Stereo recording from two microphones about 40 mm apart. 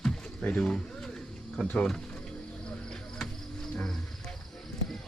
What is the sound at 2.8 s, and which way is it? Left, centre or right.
Music, centre.